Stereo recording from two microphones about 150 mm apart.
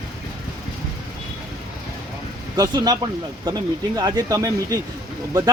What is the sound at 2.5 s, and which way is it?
Speech, 25° right (ahead or behind).